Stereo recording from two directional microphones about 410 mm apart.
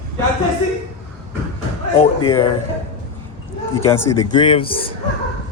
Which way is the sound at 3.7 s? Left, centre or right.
Centre.